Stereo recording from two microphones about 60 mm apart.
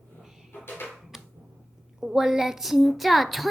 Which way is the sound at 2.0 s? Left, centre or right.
Centre.